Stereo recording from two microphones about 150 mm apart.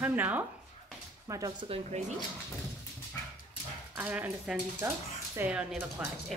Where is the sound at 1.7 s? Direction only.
50° right (ahead or behind).